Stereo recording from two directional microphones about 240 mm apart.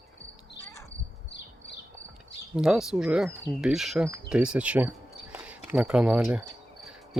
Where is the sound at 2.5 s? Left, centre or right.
Centre.